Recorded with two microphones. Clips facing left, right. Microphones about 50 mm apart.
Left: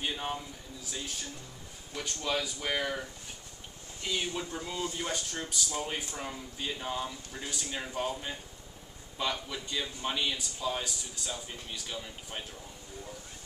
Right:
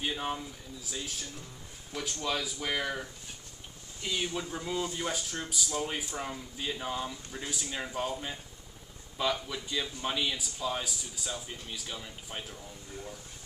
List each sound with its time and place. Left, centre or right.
0.0 s speech: centre